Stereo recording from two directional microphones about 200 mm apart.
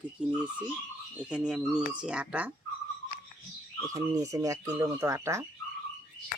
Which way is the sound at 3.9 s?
15° right (ahead or behind).